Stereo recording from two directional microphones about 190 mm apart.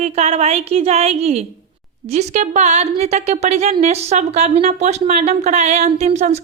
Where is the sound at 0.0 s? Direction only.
35° right (ahead or behind).